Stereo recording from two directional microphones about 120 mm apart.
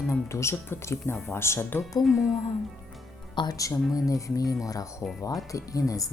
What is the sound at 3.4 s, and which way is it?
Speech, 30° left (ahead or behind).